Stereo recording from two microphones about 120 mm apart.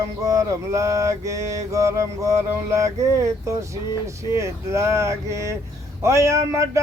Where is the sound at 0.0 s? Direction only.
25° right (ahead or behind).